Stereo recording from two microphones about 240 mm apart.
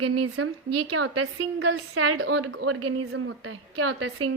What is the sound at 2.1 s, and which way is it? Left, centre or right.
A woman's voice, right.